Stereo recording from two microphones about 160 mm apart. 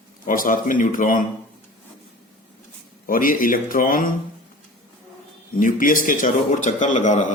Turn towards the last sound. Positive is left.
turn(degrees=50)  # may be behind; listen again after turning